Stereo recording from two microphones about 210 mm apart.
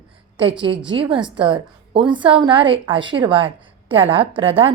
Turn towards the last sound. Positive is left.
turn(degrees=-25)  # may be behind; listen again after turning